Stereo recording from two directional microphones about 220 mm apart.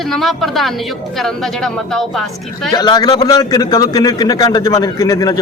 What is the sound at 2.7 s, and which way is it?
A man's voice, 20° left (ahead or behind).